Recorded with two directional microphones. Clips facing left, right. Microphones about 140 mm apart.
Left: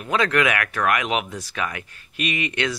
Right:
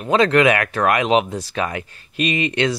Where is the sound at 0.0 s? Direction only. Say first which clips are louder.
Right 6 dB; 30° right (ahead or behind).